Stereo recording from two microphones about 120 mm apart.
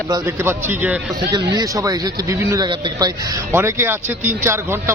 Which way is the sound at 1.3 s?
35° right (ahead or behind).